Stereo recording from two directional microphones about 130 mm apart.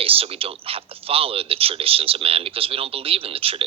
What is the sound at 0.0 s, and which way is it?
Speech, 45° right (ahead or behind).